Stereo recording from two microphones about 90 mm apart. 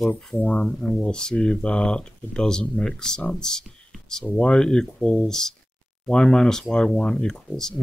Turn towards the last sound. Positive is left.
turn(degrees=5)  # may be behind; listen again after turning